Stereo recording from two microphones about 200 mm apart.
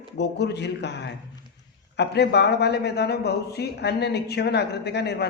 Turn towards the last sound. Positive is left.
turn(degrees=55)  # may be behind; listen again after turning